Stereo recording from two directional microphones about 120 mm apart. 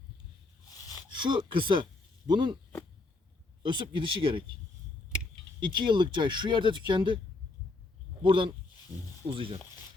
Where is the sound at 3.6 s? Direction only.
40° right (ahead or behind).